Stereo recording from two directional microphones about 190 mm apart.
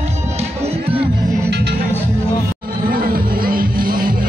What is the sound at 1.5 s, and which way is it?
Music, 60° right (ahead or behind).